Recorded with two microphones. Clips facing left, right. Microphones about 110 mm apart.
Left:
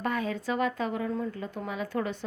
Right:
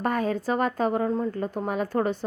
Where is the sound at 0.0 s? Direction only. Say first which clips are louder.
Right 5 dB; 45° right (ahead or behind).